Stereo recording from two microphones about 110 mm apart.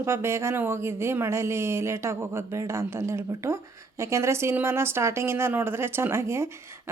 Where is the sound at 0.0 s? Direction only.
25° right (ahead or behind).